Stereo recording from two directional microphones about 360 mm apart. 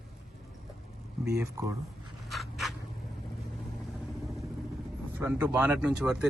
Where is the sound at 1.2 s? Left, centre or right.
Centre.